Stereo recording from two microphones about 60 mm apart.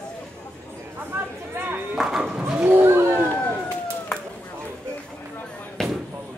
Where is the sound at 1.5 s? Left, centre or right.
Right.